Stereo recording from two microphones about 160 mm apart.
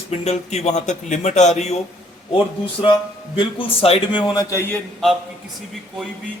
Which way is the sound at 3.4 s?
35° left (ahead or behind).